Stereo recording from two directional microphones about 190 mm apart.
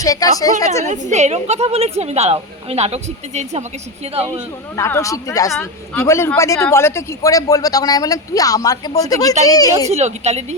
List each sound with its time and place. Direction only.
0.0 s a woman's voice: 20° left (ahead or behind)
0.9 s a woman's voice: 40° right (ahead or behind)
4.8 s speech: 15° left (ahead or behind)
5.5 s a woman's voice: 5° left (ahead or behind)
9.9 s a woman's voice: 35° right (ahead or behind)